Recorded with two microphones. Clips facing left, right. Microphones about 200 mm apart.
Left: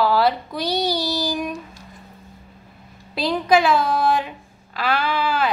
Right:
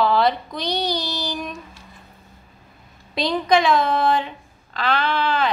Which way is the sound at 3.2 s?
5° left (ahead or behind).